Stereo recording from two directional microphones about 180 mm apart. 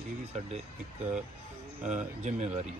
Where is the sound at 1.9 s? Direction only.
40° right (ahead or behind).